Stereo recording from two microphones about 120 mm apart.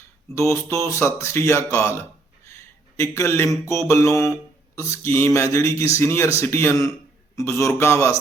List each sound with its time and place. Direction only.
0.3 s speech: 25° left (ahead or behind)